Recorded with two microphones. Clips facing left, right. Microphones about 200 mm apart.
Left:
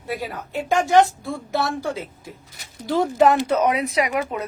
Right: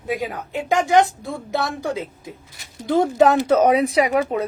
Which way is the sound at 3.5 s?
35° right (ahead or behind).